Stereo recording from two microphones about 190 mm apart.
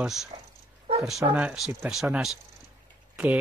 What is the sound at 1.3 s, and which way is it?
Speech, 5° right (ahead or behind).